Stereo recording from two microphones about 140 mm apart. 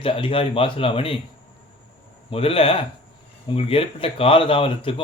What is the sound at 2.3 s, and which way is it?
Speech, 45° left (ahead or behind).